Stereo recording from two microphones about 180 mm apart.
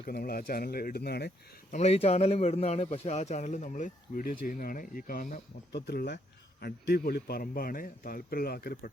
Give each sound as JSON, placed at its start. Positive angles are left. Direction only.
{"t": 0.0, "sound": "a man's voice", "side_deg": 55}
{"t": 1.7, "sound": "a man's voice", "side_deg": 35}
{"t": 5.8, "sound": "a man's voice", "side_deg": 65}